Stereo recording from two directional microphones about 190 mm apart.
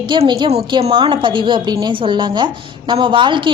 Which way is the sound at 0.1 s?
25° right (ahead or behind).